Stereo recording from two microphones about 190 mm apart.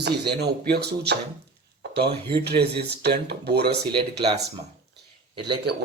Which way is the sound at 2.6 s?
60° right (ahead or behind).